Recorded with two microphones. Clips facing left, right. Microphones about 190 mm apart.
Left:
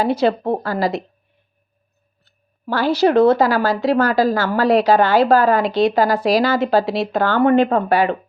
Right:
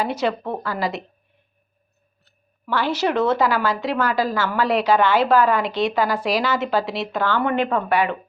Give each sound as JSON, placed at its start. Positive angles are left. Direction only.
{"t": 0.0, "sound": "a woman's voice", "side_deg": 35}
{"t": 2.6, "sound": "a woman's voice", "side_deg": 35}